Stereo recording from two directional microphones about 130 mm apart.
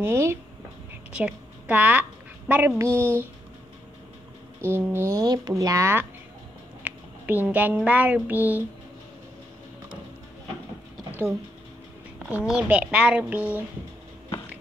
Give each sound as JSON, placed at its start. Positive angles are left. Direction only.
{"t": 0.0, "sound": "a woman's voice", "side_deg": -20}
{"t": 4.6, "sound": "speech", "side_deg": -20}
{"t": 11.1, "sound": "a sound", "side_deg": -15}
{"t": 12.3, "sound": "a woman's voice", "side_deg": -10}